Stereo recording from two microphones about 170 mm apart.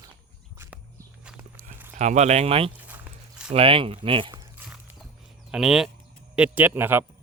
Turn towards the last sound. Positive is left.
turn(degrees=-10)  # may be behind; listen again after turning